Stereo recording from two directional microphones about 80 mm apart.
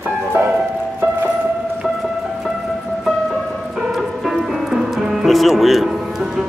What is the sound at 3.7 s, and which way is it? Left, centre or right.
Music, centre.